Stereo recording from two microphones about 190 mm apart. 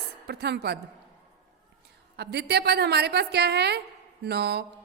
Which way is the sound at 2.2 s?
60° right (ahead or behind).